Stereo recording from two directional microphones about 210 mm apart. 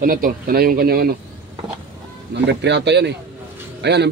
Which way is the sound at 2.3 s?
55° right (ahead or behind).